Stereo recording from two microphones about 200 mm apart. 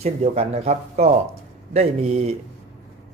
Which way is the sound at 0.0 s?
30° right (ahead or behind).